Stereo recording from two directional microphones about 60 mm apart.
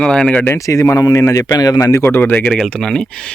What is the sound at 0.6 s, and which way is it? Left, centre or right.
Speech, left.